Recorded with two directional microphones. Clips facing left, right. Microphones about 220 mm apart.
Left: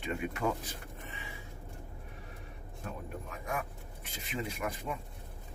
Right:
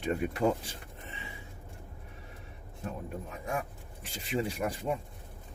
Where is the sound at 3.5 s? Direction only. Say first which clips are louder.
Right 3 dB; 30° right (ahead or behind).